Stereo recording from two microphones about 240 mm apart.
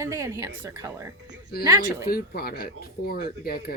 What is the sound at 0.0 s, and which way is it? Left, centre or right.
A woman's voice, centre.